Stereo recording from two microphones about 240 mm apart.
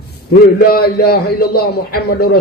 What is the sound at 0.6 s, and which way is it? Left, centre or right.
A man's voice, left.